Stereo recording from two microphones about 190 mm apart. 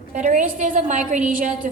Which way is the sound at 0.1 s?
40° right (ahead or behind).